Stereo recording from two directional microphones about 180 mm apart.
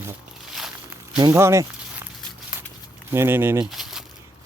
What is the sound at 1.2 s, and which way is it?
Speech, 15° right (ahead or behind).